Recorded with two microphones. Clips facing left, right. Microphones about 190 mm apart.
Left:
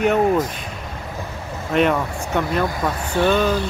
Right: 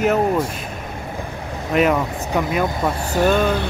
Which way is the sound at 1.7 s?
5° right (ahead or behind).